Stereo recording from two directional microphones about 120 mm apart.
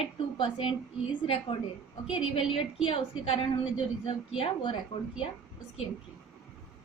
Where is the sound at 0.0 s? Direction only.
45° left (ahead or behind).